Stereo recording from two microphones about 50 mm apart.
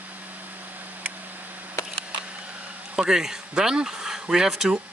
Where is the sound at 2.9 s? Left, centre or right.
Centre.